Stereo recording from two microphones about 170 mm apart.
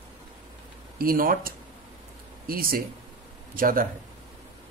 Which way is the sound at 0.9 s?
60° right (ahead or behind).